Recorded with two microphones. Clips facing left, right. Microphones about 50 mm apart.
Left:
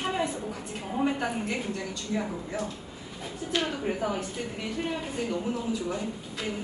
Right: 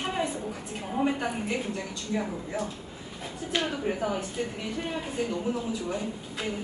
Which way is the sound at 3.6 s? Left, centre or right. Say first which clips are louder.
Right 1 dB; centre.